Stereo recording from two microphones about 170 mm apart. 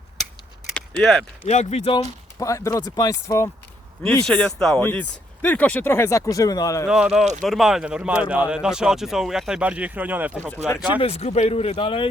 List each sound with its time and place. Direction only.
0.7 s speech: 5° left (ahead or behind)
1.5 s speech: 40° left (ahead or behind)
2.0 s speech: 20° left (ahead or behind)
4.0 s speech: 5° left (ahead or behind)
6.8 s speech: 5° right (ahead or behind)
10.3 s speech: 10° left (ahead or behind)
11.0 s speech: 40° left (ahead or behind)